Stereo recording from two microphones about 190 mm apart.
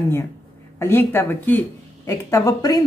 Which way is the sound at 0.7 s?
10° left (ahead or behind).